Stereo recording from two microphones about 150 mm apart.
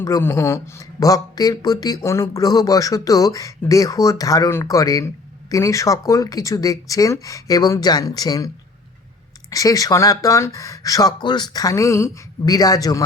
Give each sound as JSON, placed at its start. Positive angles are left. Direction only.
{"t": 0.0, "sound": "speech", "side_deg": 15}
{"t": 9.5, "sound": "speech", "side_deg": 25}